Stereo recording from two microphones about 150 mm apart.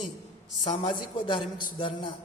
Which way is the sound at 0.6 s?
30° left (ahead or behind).